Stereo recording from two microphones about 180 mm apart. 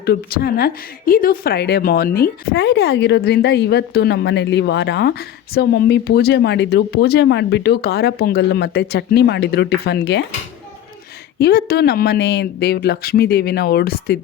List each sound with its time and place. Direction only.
0.0 s a woman's voice: 60° left (ahead or behind)
11.3 s a woman's voice: 60° left (ahead or behind)